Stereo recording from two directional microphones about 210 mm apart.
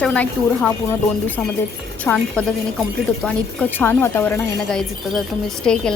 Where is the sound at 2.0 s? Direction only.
5° left (ahead or behind).